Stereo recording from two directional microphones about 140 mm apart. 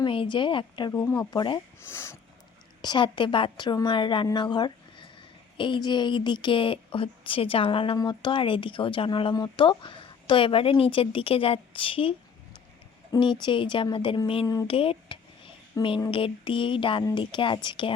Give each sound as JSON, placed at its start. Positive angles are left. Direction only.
{"t": 0.0, "sound": "a woman's voice", "side_deg": 35}
{"t": 0.9, "sound": "speech", "side_deg": 20}
{"t": 1.8, "sound": "speech", "side_deg": 20}
{"t": 2.8, "sound": "a woman's voice", "side_deg": 35}
{"t": 13.1, "sound": "a woman's voice", "side_deg": 35}
{"t": 14.4, "sound": "speech", "side_deg": 25}
{"t": 14.7, "sound": "a sound", "side_deg": 40}
{"t": 16.0, "sound": "a woman's voice", "side_deg": 35}